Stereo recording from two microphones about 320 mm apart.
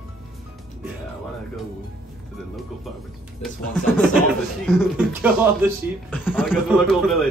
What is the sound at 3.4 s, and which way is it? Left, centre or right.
Speech, centre.